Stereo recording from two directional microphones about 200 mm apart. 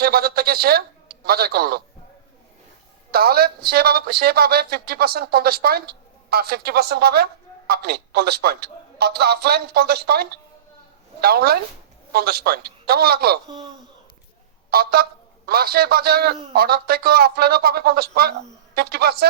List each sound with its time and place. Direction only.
0.0 s a man's voice: 50° right (ahead or behind)
3.1 s a man's voice: 50° right (ahead or behind)
14.7 s a man's voice: 50° right (ahead or behind)